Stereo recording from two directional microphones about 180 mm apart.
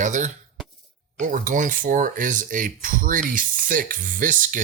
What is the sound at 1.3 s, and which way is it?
Speech, 45° right (ahead or behind).